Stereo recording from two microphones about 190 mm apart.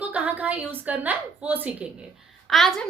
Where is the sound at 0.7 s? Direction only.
10° right (ahead or behind).